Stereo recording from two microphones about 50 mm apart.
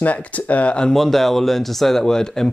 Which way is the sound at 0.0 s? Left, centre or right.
Left.